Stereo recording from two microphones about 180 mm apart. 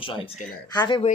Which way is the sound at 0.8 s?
25° left (ahead or behind).